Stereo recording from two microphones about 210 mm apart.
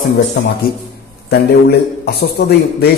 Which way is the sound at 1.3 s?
50° left (ahead or behind).